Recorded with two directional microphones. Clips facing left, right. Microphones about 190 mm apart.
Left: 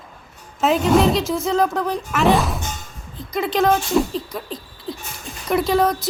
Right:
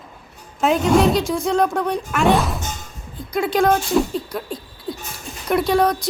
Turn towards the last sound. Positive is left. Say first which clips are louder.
# right 1 dB
turn(degrees=0)  # may be behind; listen again after turning